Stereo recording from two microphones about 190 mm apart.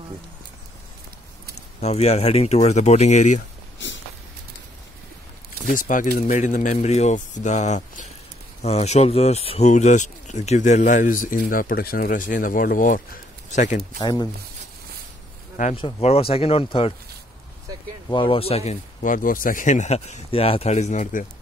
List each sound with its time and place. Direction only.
1.8 s speech: 35° left (ahead or behind)
5.7 s speech: 45° left (ahead or behind)
14.0 s speech: 20° left (ahead or behind)
15.7 s speech: 30° left (ahead or behind)
18.1 s speech: 25° left (ahead or behind)